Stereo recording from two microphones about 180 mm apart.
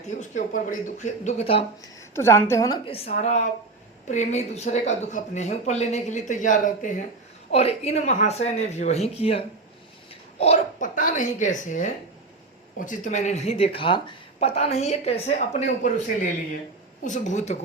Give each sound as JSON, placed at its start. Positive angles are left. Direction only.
{"t": 0.2, "sound": "speech", "side_deg": 45}
{"t": 2.1, "sound": "a woman's voice", "side_deg": 15}
{"t": 7.5, "sound": "a woman's voice", "side_deg": 35}